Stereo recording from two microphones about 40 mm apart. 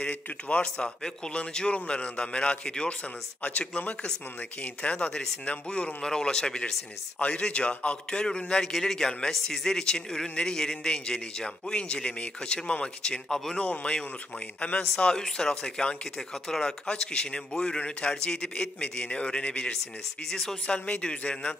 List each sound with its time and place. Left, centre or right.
0.0 s a man's voice: left
0.7 s a man's voice: centre
3.4 s a man's voice: left
13.6 s a man's voice: left; by 16.9 s centre
16.9 s a man's voice: left
20.2 s a man's voice: centre
20.6 s a man's voice: left